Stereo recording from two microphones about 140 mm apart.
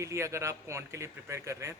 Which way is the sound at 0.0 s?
20° right (ahead or behind).